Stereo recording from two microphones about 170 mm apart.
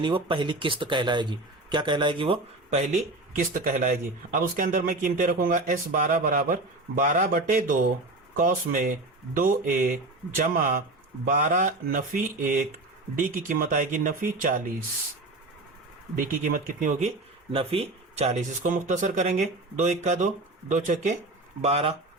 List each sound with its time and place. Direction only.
0.0 s speech: 30° right (ahead or behind)
3.5 s a man's voice: 55° right (ahead or behind)
16.1 s a man's voice: 55° right (ahead or behind)
17.5 s a man's voice: 35° right (ahead or behind)
21.6 s speech: 35° right (ahead or behind)